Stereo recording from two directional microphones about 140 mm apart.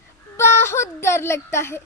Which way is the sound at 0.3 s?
20° left (ahead or behind).